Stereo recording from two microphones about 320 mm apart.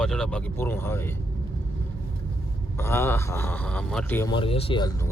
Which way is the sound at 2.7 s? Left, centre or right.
Centre.